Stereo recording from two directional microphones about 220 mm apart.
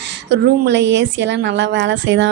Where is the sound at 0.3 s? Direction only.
50° right (ahead or behind).